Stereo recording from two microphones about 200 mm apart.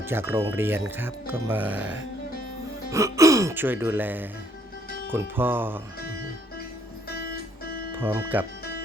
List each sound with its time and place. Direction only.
0.0 s speech: 10° right (ahead or behind)
7.1 s music: 50° left (ahead or behind)
7.9 s speech: 10° right (ahead or behind)